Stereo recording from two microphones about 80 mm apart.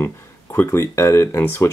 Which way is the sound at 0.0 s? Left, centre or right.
Left.